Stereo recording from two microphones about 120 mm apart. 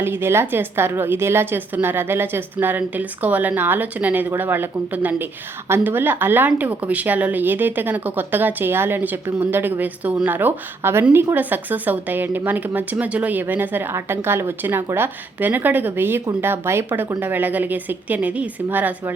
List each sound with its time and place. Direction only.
0.0 s a woman's voice: 20° right (ahead or behind)